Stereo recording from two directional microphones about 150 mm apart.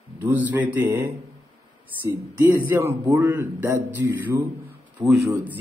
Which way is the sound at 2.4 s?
20° right (ahead or behind).